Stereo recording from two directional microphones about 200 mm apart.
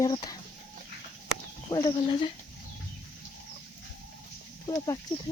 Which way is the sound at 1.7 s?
15° left (ahead or behind).